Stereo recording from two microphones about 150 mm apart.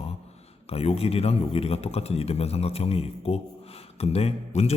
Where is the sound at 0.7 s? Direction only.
40° left (ahead or behind).